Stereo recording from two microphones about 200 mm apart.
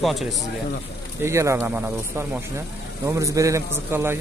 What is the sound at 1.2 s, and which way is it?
Speech, 15° right (ahead or behind).